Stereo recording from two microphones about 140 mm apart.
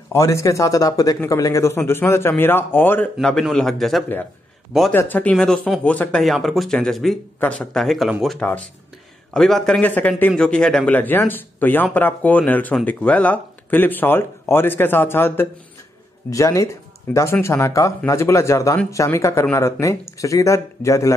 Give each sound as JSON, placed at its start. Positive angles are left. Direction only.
{"t": 0.1, "sound": "a man's voice", "side_deg": 20}
{"t": 3.2, "sound": "speech", "side_deg": 5}
{"t": 4.9, "sound": "a man's voice", "side_deg": 15}